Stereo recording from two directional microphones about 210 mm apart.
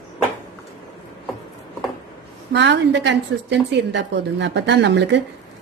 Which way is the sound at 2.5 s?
55° right (ahead or behind).